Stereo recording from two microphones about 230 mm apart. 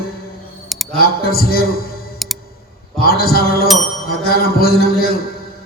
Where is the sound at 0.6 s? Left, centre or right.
Centre.